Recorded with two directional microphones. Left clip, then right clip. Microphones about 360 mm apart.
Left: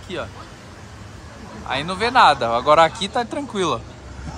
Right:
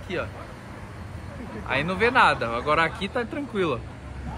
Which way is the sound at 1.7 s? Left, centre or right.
Centre.